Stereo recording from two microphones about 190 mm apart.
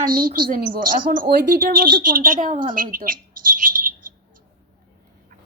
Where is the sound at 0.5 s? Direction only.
45° right (ahead or behind).